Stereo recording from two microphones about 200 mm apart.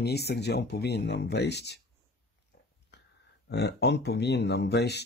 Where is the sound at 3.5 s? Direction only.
55° left (ahead or behind).